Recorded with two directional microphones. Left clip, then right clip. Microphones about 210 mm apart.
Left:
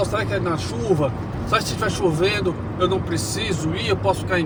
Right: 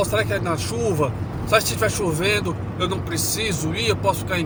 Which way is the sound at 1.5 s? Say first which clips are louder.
Right 3 dB; 25° right (ahead or behind).